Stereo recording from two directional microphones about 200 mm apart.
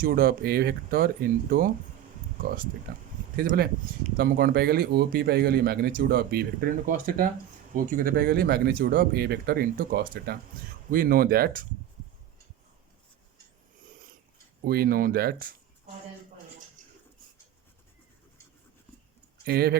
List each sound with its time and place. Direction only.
0.0 s speech: 50° right (ahead or behind)
14.6 s speech: 50° right (ahead or behind)
19.5 s speech: 50° right (ahead or behind)